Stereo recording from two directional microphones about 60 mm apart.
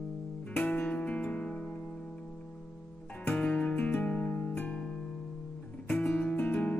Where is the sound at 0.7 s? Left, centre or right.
Centre.